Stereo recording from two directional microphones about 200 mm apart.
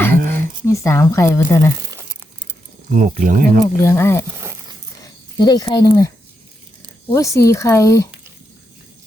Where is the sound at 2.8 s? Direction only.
40° right (ahead or behind).